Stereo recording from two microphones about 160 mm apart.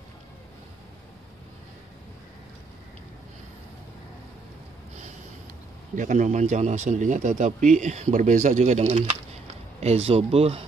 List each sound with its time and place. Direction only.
5.9 s speech: 50° right (ahead or behind)